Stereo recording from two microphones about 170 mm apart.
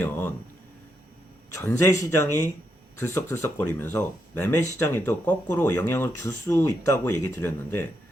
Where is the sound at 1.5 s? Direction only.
20° left (ahead or behind).